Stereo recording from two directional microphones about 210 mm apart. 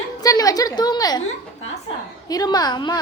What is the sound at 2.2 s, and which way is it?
Speech, 20° left (ahead or behind).